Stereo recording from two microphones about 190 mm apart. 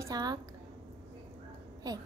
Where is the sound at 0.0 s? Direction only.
20° right (ahead or behind).